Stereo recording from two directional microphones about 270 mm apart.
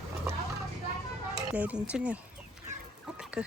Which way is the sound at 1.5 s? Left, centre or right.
Centre.